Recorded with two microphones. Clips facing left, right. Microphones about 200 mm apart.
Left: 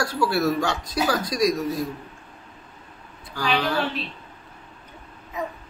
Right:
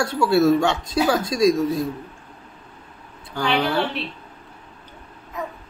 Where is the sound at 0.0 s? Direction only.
25° right (ahead or behind).